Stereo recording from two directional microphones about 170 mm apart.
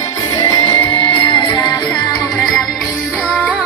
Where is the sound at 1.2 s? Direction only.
30° left (ahead or behind).